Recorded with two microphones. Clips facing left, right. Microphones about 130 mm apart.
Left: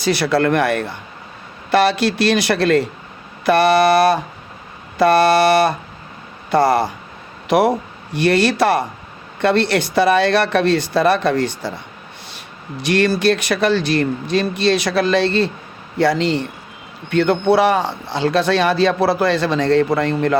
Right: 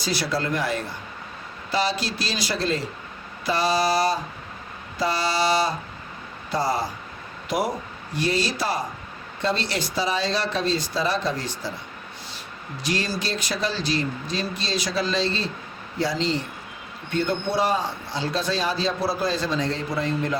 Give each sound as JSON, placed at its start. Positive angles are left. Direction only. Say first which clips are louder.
{"t": 0.0, "sound": "speech", "louder": "left 10 dB", "side_deg": 65}
{"t": 12.8, "sound": "speech", "louder": "left 12 dB", "side_deg": 65}